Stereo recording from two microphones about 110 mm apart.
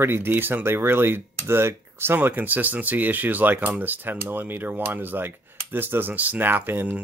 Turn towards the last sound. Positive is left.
turn(degrees=-20)  # may be behind; listen again after turning